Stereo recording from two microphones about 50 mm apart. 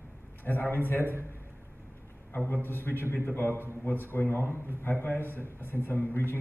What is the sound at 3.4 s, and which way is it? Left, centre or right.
Speech, right.